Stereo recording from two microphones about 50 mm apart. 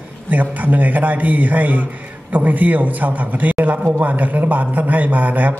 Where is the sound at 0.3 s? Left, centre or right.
Right.